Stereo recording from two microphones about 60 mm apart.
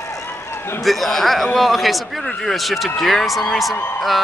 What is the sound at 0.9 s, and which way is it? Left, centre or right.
Speech, centre.